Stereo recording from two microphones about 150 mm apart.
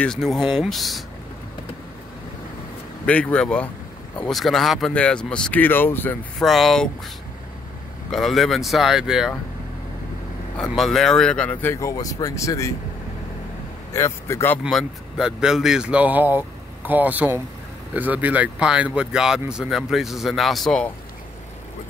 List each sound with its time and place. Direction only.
0.0 s speech: 5° left (ahead or behind)
3.1 s speech: 10° left (ahead or behind)
6.4 s speech: centre (ahead or behind)
8.1 s speech: centre (ahead or behind)
10.6 s speech: centre (ahead or behind); by 12.7 s 20° left (ahead or behind)
13.9 s speech: 20° left (ahead or behind)
14.6 s speech: centre (ahead or behind)